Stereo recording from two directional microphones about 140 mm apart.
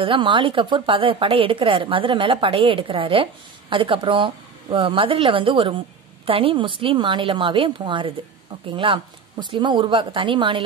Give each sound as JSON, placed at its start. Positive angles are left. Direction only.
{"t": 0.0, "sound": "speech", "side_deg": -35}